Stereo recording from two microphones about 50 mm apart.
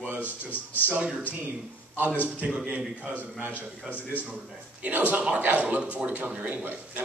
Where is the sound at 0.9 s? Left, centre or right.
Right.